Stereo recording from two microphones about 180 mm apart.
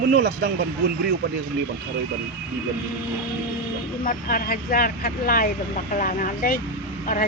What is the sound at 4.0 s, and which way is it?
Speech, 50° left (ahead or behind).